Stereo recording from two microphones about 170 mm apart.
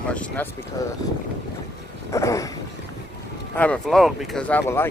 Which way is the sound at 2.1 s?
20° left (ahead or behind).